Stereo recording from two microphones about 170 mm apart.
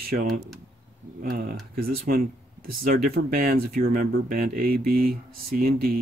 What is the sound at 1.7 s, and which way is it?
Speech, 60° right (ahead or behind).